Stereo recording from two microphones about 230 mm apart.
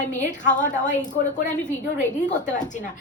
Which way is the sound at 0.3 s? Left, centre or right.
Left.